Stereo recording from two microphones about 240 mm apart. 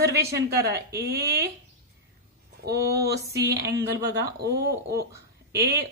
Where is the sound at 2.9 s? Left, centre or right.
Right.